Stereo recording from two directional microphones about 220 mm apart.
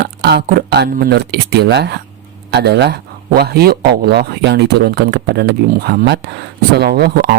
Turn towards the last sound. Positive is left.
turn(degrees=-45)  # may be behind; listen again after turning